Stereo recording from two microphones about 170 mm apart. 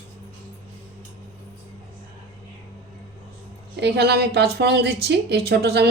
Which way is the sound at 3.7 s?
80° right.